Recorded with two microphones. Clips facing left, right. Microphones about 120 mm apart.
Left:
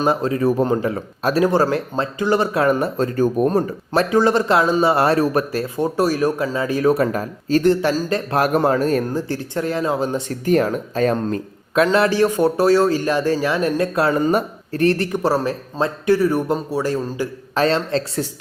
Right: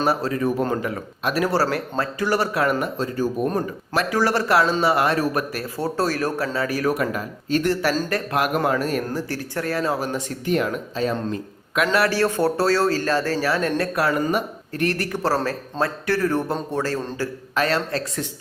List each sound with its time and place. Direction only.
0.0 s speech: 20° left (ahead or behind)
1.5 s speech: 20° left (ahead or behind)
3.0 s speech: 45° left (ahead or behind)
4.1 s speech: 20° left (ahead or behind)
5.8 s speech: 15° left (ahead or behind); by 9.0 s 35° left (ahead or behind)
9.1 s speech: 20° left (ahead or behind)
10.4 s speech: 40° left (ahead or behind)
11.9 s speech: 20° left (ahead or behind)
14.3 s speech: 35° left (ahead or behind)
15.2 s speech: 15° left (ahead or behind)
17.5 s speech: 30° left (ahead or behind)